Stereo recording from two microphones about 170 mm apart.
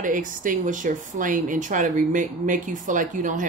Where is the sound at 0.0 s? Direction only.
50° right (ahead or behind).